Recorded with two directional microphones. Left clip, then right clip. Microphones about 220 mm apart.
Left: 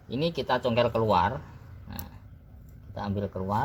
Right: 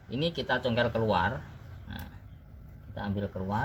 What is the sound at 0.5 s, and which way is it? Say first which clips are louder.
Speech: left 4 dB; 20° left (ahead or behind).